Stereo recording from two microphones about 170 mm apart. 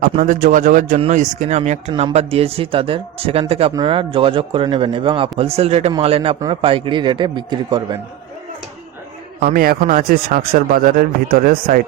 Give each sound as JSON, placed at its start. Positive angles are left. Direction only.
{"t": 0.0, "sound": "a man's voice", "side_deg": -55}
{"t": 1.9, "sound": "a man's voice", "side_deg": -30}
{"t": 9.4, "sound": "speech", "side_deg": -60}